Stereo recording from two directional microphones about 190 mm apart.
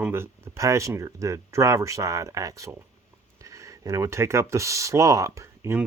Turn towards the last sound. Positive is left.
turn(degrees=-15)  # may be behind; listen again after turning